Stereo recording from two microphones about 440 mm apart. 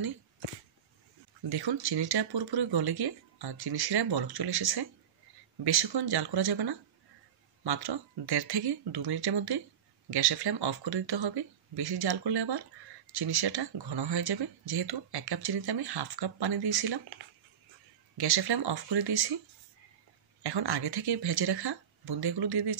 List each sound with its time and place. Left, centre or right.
1.5 s speech: right
20.4 s speech: right